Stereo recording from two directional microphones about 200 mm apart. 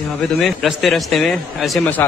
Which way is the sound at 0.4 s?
Centre (ahead or behind).